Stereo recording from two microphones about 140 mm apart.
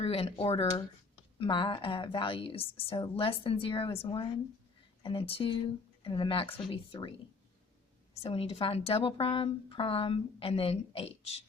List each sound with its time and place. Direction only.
0.0 s a woman's voice: 45° left (ahead or behind)
8.1 s a woman's voice: 45° left (ahead or behind)